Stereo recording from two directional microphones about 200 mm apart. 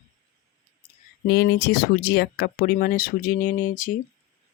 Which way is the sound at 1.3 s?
55° left (ahead or behind).